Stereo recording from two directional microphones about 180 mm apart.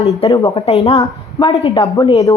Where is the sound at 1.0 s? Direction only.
20° left (ahead or behind).